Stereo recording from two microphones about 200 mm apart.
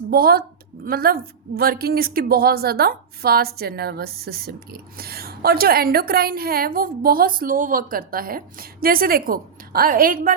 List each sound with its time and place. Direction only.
0.1 s a woman's voice: 50° right (ahead or behind)